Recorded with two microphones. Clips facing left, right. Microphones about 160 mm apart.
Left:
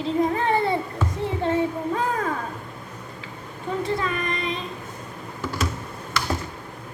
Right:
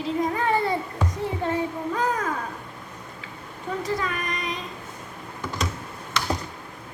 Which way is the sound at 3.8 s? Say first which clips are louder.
Left 2 dB; 25° left (ahead or behind).